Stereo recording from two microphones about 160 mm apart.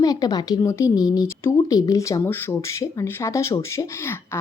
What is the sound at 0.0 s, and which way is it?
Speech, 25° left (ahead or behind).